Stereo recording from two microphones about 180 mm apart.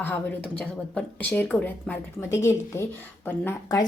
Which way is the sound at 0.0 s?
10° left (ahead or behind).